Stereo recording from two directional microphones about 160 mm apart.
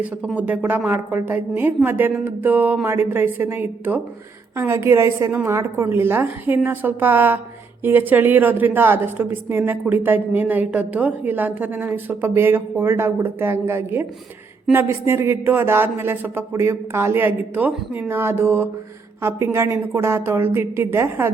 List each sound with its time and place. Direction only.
0.0 s a woman's voice: 10° right (ahead or behind)